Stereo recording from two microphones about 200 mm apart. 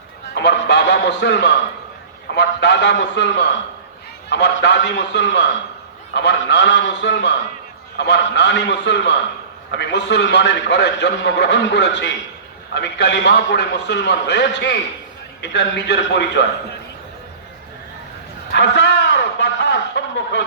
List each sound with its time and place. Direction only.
0.3 s music: 60° left (ahead or behind)
2.3 s a man's voice: 60° left (ahead or behind)
4.3 s a man's voice: 60° left (ahead or behind)
18.5 s a man's voice: 60° left (ahead or behind)